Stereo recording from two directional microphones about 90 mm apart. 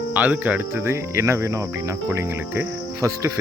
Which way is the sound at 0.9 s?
30° right (ahead or behind).